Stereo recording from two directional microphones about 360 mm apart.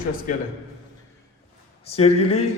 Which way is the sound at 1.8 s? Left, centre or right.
Centre.